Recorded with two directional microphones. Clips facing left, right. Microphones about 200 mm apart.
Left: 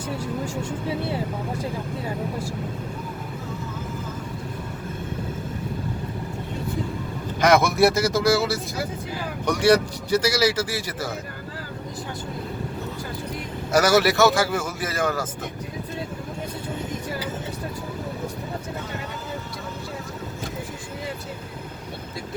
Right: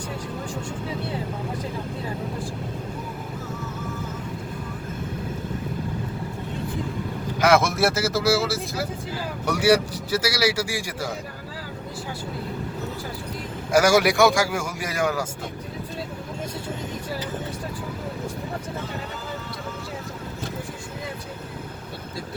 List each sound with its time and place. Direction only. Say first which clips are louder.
7.4 s a man's voice: left 2 dB; centre (ahead or behind)
13.7 s a man's voice: even; 10° right (ahead or behind)